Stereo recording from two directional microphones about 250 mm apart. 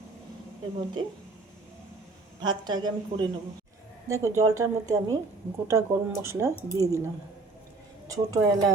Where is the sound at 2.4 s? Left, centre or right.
Centre.